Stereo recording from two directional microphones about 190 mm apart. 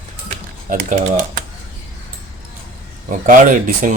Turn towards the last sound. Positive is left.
turn(degrees=-45)  # may be behind; listen again after turning